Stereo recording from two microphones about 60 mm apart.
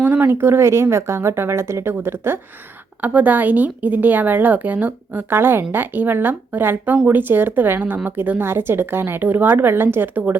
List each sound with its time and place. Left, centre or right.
0.0 s speech: right
3.0 s a woman's voice: right